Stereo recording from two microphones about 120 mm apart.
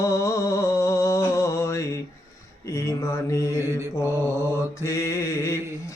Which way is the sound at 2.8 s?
25° left (ahead or behind).